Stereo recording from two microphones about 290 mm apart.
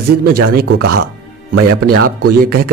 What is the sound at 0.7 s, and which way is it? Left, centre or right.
Speech, right.